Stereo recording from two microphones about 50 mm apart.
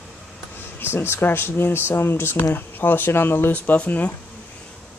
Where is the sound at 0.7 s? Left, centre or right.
Left.